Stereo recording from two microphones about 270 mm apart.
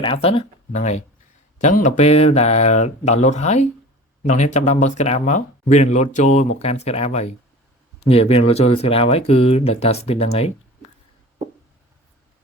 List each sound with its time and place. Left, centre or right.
0.0 s speech: centre